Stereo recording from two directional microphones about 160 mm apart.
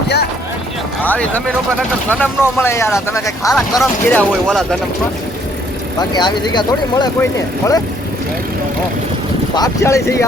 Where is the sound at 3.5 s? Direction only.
Centre (ahead or behind).